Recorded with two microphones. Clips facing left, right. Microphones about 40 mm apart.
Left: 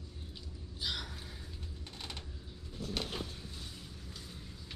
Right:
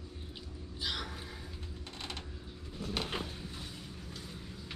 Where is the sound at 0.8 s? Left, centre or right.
Centre.